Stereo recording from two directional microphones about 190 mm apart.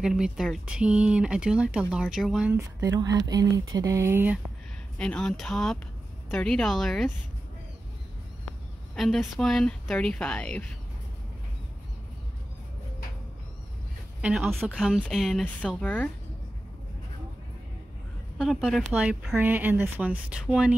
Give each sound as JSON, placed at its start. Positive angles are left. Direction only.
{"t": 0.0, "sound": "speech", "side_deg": -5}
{"t": 2.8, "sound": "speech", "side_deg": -15}
{"t": 4.9, "sound": "speech", "side_deg": 5}
{"t": 8.9, "sound": "speech", "side_deg": 0}
{"t": 14.2, "sound": "speech", "side_deg": -5}
{"t": 18.4, "sound": "speech", "side_deg": 0}